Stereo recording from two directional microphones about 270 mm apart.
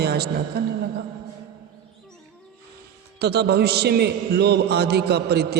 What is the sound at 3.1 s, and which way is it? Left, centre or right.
A man's voice, right.